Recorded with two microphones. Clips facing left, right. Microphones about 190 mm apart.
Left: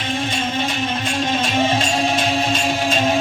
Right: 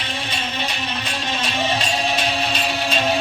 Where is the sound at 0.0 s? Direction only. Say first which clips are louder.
Left 6 dB; 50° left (ahead or behind).